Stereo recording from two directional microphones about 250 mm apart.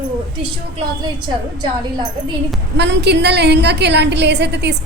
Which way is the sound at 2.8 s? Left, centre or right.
Right.